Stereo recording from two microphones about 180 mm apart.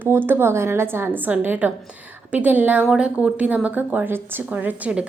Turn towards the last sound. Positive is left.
turn(degrees=-10)  # may be behind; listen again after turning